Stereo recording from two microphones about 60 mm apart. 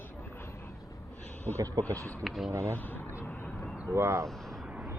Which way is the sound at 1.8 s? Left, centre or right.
Right.